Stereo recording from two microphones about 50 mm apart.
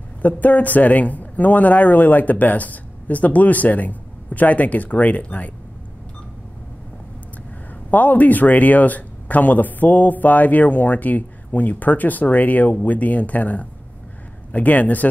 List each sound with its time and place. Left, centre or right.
0.2 s speech: left
7.9 s speech: left